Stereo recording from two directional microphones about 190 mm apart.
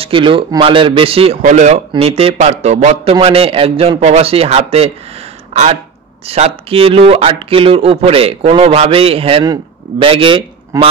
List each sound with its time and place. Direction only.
0.0 s speech: 25° right (ahead or behind)